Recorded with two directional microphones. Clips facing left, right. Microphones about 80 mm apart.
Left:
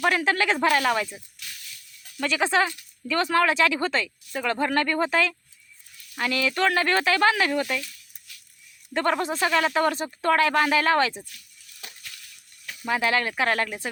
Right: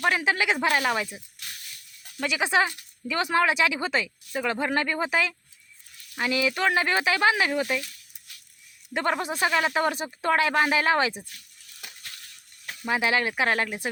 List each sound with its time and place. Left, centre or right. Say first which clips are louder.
0.0 s speech: left 2 dB; centre
8.9 s speech: left 2 dB; centre
12.0 s a sound: even; right
12.9 s speech: left 1 dB; centre